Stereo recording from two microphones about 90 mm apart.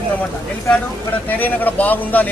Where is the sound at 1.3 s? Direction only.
20° left (ahead or behind).